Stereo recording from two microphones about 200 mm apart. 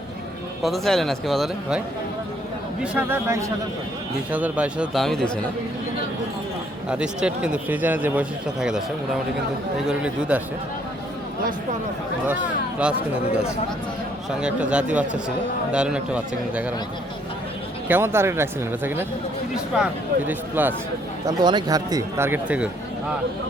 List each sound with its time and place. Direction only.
0.6 s speech: centre (ahead or behind)
2.8 s speech: 10° right (ahead or behind)
6.8 s speech: 5° right (ahead or behind)
9.8 s speech: 5° right (ahead or behind)
14.4 s speech: 5° right (ahead or behind)
17.8 s speech: 10° right (ahead or behind)
21.2 s speech: 20° right (ahead or behind)